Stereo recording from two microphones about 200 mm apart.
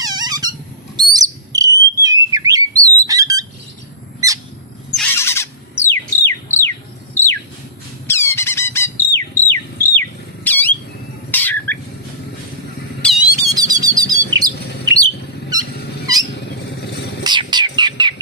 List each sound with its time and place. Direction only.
0.0 s squeak: 20° right (ahead or behind)
0.9 s bird: 20° right (ahead or behind)
4.9 s a sound: 10° left (ahead or behind)
11.3 s squawk: 10° left (ahead or behind)
13.0 s squeak: 5° left (ahead or behind)
13.5 s bird: 20° right (ahead or behind)
15.7 s cat: 55° left (ahead or behind)
16.8 s vehicle: 55° left (ahead or behind)
17.2 s bird: 20° right (ahead or behind)